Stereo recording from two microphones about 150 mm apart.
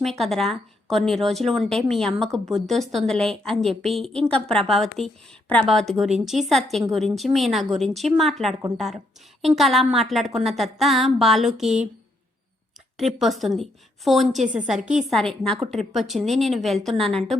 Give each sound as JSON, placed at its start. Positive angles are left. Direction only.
{"t": 0.0, "sound": "a woman's voice", "side_deg": 0}
{"t": 13.0, "sound": "a woman's voice", "side_deg": 0}